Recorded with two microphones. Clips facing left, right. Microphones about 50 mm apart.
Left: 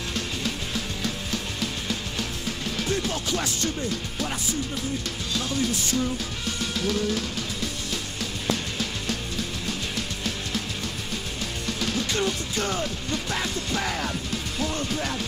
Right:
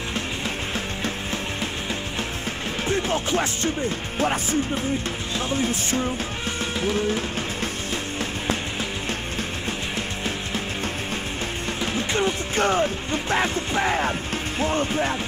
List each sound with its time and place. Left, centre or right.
0.1 s music: right